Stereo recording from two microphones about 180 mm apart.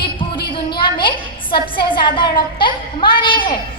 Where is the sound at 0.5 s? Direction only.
25° left (ahead or behind).